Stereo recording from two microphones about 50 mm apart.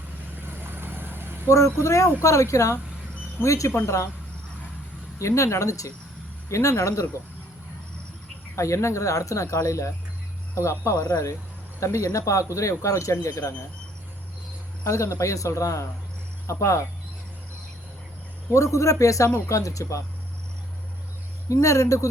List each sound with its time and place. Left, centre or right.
0.4 s vehicle: right
1.5 s speech: left
5.2 s speech: left
8.5 s speech: left
10.5 s speech: left
14.8 s speech: left
18.5 s speech: left
21.5 s speech: left